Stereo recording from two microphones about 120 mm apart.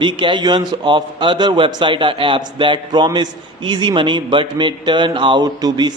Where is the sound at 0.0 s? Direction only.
40° right (ahead or behind).